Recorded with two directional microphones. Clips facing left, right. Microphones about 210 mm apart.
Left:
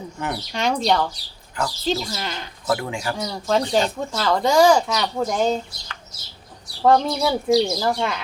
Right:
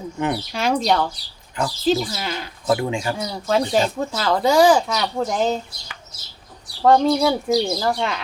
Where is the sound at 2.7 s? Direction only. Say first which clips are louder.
Right 3 dB; 20° right (ahead or behind).